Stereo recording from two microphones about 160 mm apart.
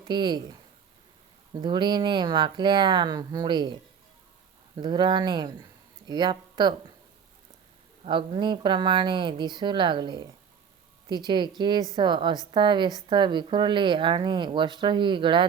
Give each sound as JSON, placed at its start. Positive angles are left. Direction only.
{"t": 0.0, "sound": "speech", "side_deg": -30}
{"t": 1.5, "sound": "a woman's voice", "side_deg": -30}
{"t": 4.8, "sound": "a woman's voice", "side_deg": -30}
{"t": 8.0, "sound": "a woman's voice", "side_deg": -35}
{"t": 11.3, "sound": "a woman's voice", "side_deg": -30}